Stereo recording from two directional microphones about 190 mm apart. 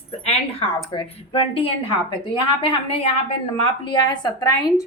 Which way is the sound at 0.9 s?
30° left (ahead or behind).